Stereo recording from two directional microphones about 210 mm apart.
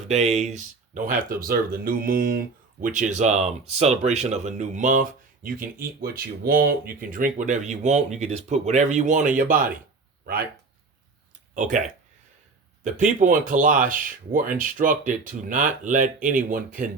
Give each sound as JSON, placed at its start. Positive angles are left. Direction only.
{"t": 0.1, "sound": "speech", "side_deg": -30}
{"t": 11.5, "sound": "speech", "side_deg": -35}